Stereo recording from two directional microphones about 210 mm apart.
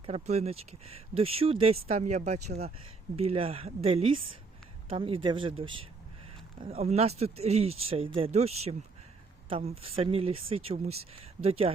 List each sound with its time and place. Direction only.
0.0 s speech: 30° right (ahead or behind)